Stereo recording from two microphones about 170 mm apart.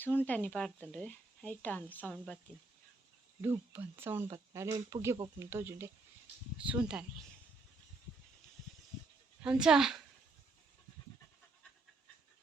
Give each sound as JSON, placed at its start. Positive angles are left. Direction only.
{"t": 0.0, "sound": "speech", "side_deg": 10}
{"t": 3.4, "sound": "speech", "side_deg": -15}
{"t": 9.4, "sound": "speech", "side_deg": -5}